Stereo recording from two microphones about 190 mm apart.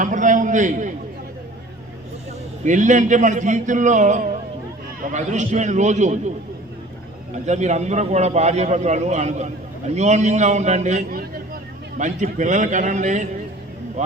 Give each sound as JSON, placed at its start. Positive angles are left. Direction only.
{"t": 0.0, "sound": "a man's voice", "side_deg": -40}
{"t": 2.6, "sound": "a man's voice", "side_deg": -40}
{"t": 7.4, "sound": "a man's voice", "side_deg": -40}